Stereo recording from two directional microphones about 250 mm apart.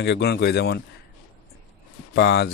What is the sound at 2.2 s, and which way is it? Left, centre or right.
Speech, left.